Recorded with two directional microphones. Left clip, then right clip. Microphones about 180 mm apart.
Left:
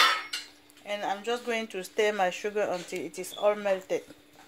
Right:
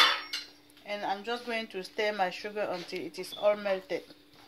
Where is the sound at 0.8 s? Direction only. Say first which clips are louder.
Left 2 dB; 70° left (ahead or behind).